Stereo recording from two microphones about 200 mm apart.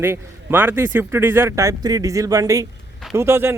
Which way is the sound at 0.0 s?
10° right (ahead or behind).